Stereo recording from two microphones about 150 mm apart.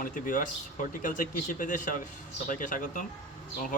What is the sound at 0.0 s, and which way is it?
A man's voice, 65° left (ahead or behind).